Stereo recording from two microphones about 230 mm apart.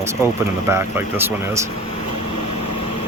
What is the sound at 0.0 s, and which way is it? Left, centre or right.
Speech, centre.